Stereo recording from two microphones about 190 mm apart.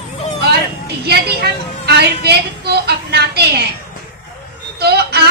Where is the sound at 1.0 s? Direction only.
60° right (ahead or behind).